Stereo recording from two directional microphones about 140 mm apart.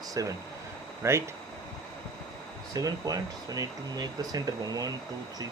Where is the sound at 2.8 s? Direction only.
25° right (ahead or behind).